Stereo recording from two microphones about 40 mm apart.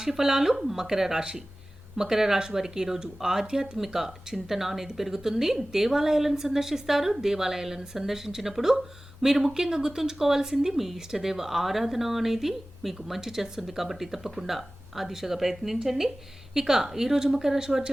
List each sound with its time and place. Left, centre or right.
0.0 s a woman's voice: centre